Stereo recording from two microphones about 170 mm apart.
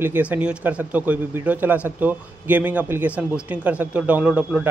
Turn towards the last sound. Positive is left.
turn(degrees=-5)  # may be behind; listen again after turning